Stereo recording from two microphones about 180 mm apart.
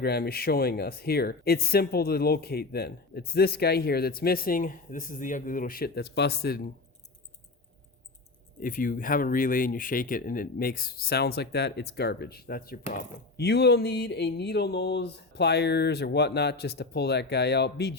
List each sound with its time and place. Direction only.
0.0 s speech: 60° left (ahead or behind)
8.5 s speech: 50° left (ahead or behind); by 17.9 s 65° left (ahead or behind)